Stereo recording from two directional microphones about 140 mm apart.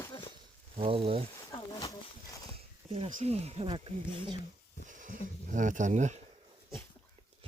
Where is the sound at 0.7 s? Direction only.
40° right (ahead or behind).